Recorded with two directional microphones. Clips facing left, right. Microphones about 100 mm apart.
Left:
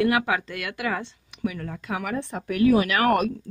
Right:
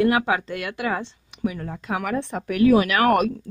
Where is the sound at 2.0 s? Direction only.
70° right (ahead or behind).